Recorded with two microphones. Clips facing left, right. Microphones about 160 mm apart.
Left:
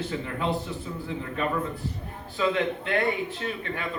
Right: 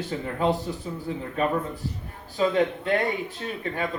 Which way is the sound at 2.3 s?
35° right (ahead or behind).